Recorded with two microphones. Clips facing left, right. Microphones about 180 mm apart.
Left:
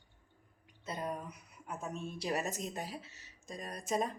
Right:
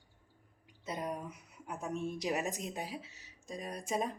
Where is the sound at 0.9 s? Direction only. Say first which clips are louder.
Right 1 dB; 15° right (ahead or behind).